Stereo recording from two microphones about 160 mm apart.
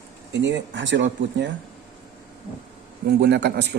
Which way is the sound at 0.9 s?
90° right.